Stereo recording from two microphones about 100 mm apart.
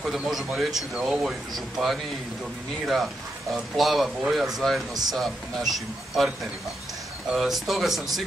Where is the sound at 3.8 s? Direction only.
Centre (ahead or behind).